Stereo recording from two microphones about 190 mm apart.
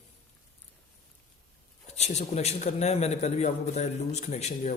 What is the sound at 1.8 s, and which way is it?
A man's voice, 35° left (ahead or behind).